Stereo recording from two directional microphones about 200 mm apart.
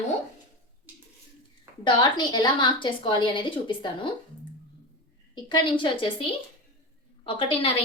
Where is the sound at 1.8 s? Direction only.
20° left (ahead or behind).